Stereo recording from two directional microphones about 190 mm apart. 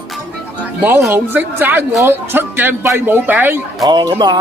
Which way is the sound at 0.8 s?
10° right (ahead or behind).